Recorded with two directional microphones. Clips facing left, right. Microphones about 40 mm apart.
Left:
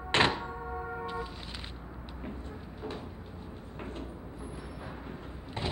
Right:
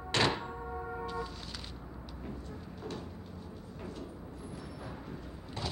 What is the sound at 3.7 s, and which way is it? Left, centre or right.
Vehicle, left.